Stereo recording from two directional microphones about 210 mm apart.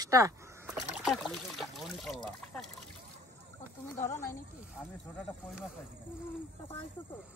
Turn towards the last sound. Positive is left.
turn(degrees=0)  # may be behind; listen again after turning